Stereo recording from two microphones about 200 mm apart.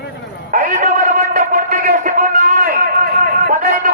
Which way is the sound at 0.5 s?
40° right (ahead or behind).